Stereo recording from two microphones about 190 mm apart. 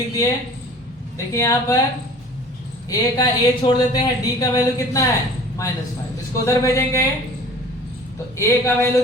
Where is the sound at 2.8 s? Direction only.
20° left (ahead or behind).